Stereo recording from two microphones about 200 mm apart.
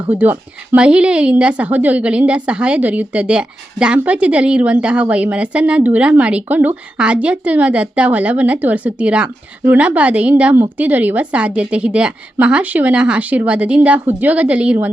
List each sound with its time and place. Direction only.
0.1 s a woman's voice: 10° right (ahead or behind)